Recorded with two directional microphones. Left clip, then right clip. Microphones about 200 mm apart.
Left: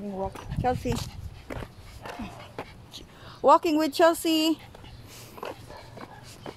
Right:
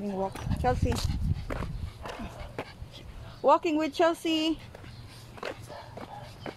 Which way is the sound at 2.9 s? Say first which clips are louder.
Left 4 dB; 45° left (ahead or behind).